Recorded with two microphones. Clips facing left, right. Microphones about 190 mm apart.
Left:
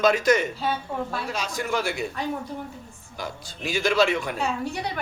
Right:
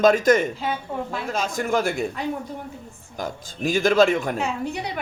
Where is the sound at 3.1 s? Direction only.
45° right (ahead or behind).